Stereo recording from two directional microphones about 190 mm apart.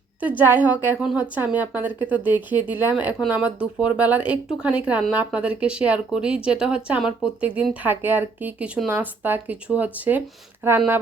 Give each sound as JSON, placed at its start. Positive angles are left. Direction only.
{"t": 0.2, "sound": "speech", "side_deg": -10}